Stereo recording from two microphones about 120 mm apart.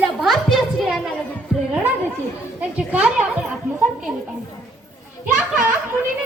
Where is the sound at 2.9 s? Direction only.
15° right (ahead or behind).